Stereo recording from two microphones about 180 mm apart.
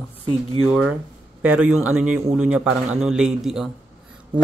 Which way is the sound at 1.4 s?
5° right (ahead or behind).